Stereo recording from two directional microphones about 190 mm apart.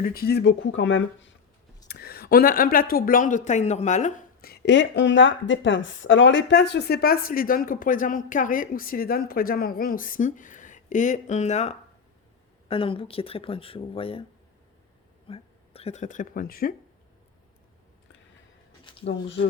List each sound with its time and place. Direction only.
0.0 s speech: 50° left (ahead or behind); by 1.4 s 80° left
1.9 s speech: 55° left (ahead or behind); by 14.3 s 30° left (ahead or behind)
15.3 s speech: 30° left (ahead or behind); by 16.7 s 50° left (ahead or behind)
19.0 s speech: 70° left (ahead or behind)